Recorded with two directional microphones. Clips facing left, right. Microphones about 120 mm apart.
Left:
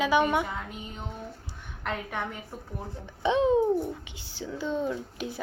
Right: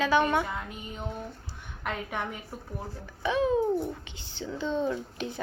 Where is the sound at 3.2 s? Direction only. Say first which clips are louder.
Left 3 dB; 25° left (ahead or behind).